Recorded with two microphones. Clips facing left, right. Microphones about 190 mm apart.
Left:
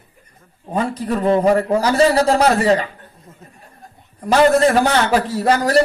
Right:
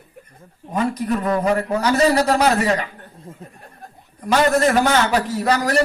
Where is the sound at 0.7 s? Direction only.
30° left (ahead or behind).